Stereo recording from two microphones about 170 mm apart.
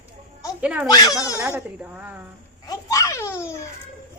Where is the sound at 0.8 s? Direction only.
20° left (ahead or behind).